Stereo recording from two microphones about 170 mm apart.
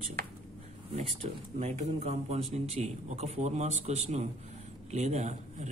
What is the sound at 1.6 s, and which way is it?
A man's voice, 40° right (ahead or behind).